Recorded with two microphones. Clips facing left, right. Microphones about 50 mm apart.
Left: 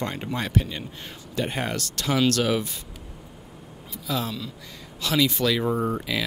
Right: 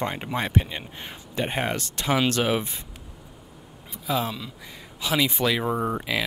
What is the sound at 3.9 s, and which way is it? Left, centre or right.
Speech, right.